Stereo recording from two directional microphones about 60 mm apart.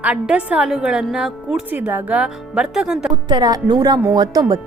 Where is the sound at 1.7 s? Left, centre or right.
Right.